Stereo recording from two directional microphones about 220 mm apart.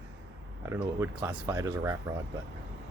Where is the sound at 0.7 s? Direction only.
10° right (ahead or behind).